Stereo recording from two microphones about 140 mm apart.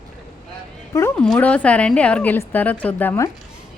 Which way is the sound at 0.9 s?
20° left (ahead or behind).